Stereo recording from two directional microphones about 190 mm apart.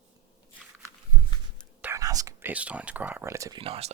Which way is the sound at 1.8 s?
15° right (ahead or behind).